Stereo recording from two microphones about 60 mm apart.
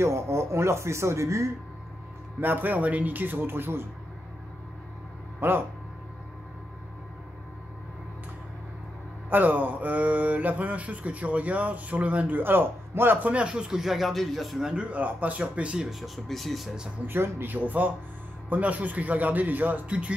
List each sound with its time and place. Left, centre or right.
0.0 s speech: right
2.4 s speech: right
5.4 s speech: right
9.3 s speech: right
13.3 s speech: centre
14.7 s speech: right
15.9 s speech: centre
17.0 s speech: right